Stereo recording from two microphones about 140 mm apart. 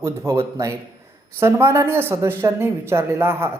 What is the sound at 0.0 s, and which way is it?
Speech, 25° right (ahead or behind).